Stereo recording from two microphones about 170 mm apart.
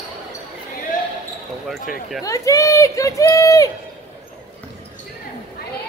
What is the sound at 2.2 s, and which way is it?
Speech, 20° left (ahead or behind).